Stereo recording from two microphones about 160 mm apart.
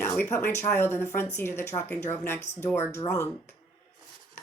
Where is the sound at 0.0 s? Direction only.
15° left (ahead or behind).